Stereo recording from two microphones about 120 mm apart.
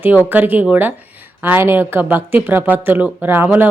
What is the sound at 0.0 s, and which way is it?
Speech, 15° right (ahead or behind).